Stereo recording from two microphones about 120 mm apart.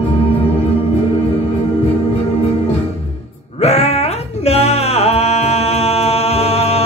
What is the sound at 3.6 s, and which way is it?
Music, 65° left (ahead or behind).